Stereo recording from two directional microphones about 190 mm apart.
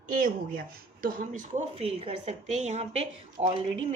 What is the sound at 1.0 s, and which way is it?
Speech, 45° right (ahead or behind).